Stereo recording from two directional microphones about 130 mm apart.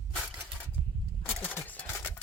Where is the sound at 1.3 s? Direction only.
10° left (ahead or behind).